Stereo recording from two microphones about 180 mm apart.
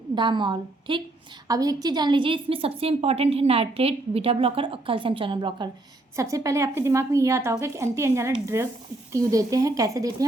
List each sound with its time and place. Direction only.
0.2 s a woman's voice: 25° right (ahead or behind)